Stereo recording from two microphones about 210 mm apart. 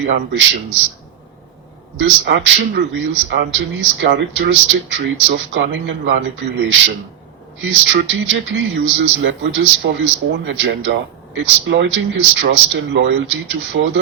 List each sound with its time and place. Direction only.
0.0 s a man's voice: 65° right (ahead or behind)
2.0 s a man's voice: 60° right (ahead or behind)